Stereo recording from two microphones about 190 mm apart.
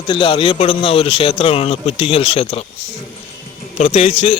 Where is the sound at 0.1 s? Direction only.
25° left (ahead or behind).